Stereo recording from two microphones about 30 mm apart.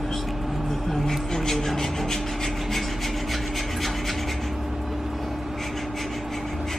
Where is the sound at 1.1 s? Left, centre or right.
Centre.